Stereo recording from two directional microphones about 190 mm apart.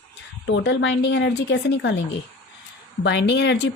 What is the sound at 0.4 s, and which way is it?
Speech, 80° left.